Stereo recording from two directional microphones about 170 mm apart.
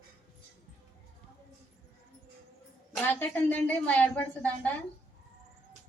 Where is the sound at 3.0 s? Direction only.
10° left (ahead or behind).